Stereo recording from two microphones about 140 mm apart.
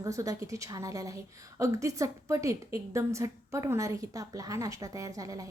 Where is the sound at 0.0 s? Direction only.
25° right (ahead or behind).